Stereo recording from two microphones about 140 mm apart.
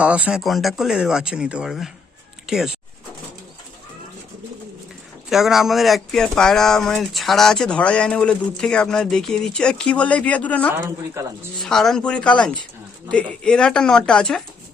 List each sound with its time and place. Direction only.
0.0 s speech: 10° right (ahead or behind)
5.3 s speech: centre (ahead or behind)
10.7 s speech: 20° right (ahead or behind)
11.5 s speech: 5° left (ahead or behind)